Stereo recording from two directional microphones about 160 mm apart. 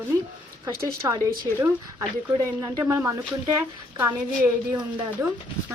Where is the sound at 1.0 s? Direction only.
20° right (ahead or behind).